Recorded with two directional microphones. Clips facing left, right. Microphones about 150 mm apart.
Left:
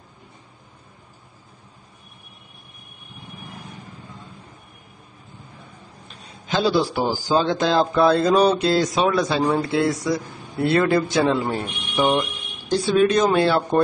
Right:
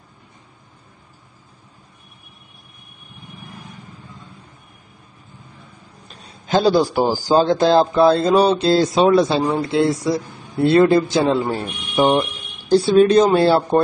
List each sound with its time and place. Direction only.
6.0 s a man's voice: 40° right (ahead or behind)